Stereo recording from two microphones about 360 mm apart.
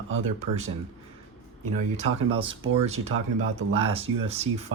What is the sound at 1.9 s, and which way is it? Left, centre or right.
Speech, centre.